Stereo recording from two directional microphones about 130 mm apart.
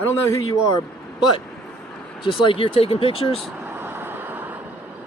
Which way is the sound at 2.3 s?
40° left (ahead or behind).